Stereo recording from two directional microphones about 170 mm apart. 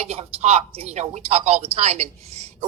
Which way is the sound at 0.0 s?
40° right (ahead or behind).